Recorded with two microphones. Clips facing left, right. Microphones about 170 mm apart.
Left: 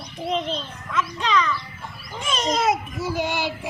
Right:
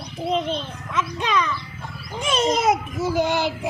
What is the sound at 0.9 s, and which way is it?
Speech, 20° right (ahead or behind).